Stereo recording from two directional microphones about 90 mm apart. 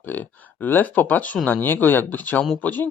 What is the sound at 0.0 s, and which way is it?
Speech, 20° left (ahead or behind).